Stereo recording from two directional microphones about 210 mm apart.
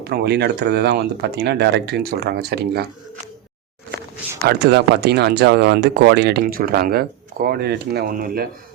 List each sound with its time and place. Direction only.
0.0 s speech: 50° right (ahead or behind)
4.4 s speech: 55° right (ahead or behind)